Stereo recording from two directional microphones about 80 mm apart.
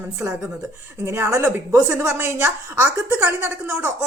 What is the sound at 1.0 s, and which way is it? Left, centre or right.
Speech, right.